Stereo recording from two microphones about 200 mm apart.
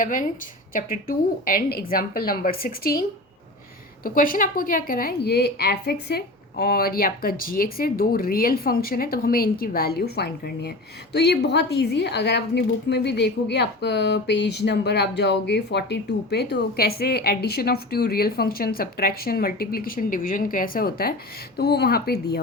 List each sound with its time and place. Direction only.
0.0 s a woman's voice: 45° left (ahead or behind)
4.0 s a woman's voice: 45° left (ahead or behind)